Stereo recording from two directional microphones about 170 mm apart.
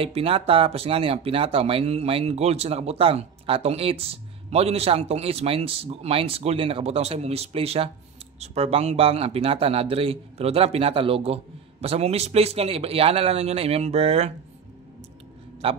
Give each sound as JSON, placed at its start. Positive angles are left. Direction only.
{"t": 0.0, "sound": "speech", "side_deg": -35}